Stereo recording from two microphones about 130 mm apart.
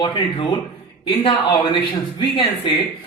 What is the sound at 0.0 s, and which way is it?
Speech, 40° left (ahead or behind).